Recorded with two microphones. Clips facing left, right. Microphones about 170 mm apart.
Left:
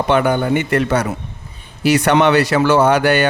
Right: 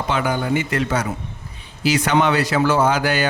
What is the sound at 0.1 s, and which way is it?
Speech, 60° left (ahead or behind).